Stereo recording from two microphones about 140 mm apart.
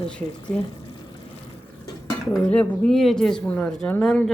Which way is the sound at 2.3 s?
10° left (ahead or behind).